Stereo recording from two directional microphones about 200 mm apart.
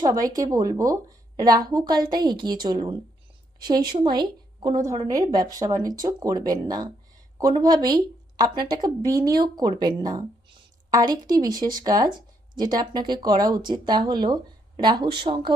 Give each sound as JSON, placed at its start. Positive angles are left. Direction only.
{"t": 0.0, "sound": "a woman's voice", "side_deg": -20}